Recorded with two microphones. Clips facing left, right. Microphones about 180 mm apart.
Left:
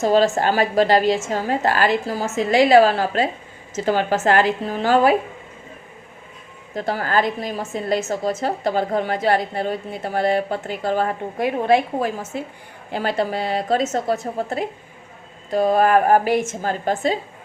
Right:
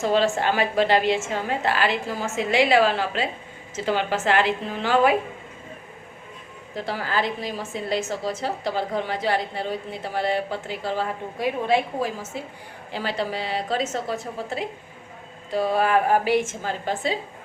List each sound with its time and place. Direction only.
0.0 s a woman's voice: 40° left (ahead or behind)
6.7 s a woman's voice: 45° left (ahead or behind)